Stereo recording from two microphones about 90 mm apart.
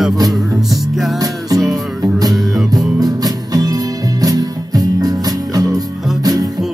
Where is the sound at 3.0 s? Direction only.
45° right (ahead or behind).